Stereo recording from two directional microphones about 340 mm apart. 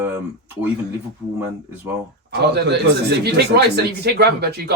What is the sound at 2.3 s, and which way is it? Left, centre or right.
Speech, right.